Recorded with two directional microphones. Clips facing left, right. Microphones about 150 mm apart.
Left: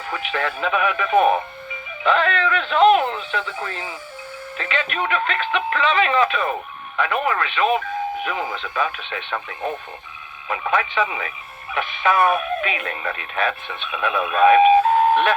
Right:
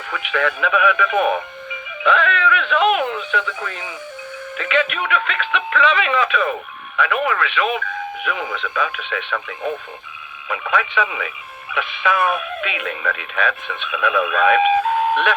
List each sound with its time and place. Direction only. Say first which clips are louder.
0.1 s speech: right 4 dB; 35° left (ahead or behind)